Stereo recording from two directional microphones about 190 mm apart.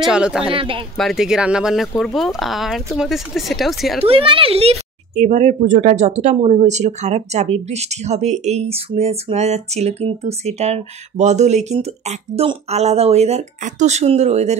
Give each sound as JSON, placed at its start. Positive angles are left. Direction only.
{"t": 0.0, "sound": "speech", "side_deg": -5}
{"t": 0.6, "sound": "speech", "side_deg": -30}
{"t": 0.9, "sound": "speech", "side_deg": 0}
{"t": 4.0, "sound": "speech", "side_deg": -30}